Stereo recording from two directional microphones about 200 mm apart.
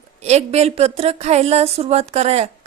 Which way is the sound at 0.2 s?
35° right (ahead or behind).